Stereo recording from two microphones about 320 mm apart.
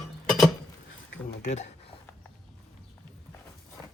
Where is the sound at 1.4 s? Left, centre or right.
Left.